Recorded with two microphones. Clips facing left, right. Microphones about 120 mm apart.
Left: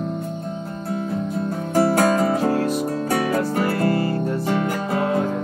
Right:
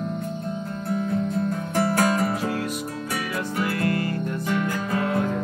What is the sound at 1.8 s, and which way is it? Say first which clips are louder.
Music: left 4 dB; 40° left (ahead or behind).